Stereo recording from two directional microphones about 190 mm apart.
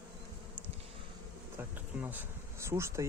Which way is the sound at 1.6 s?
10° right (ahead or behind).